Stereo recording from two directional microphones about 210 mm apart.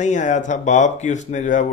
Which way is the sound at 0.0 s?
35° left (ahead or behind).